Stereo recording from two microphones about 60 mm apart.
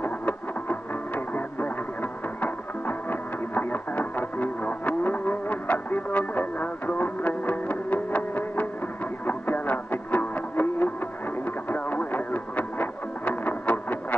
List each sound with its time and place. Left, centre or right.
0.0 s music: left
12.1 s music: left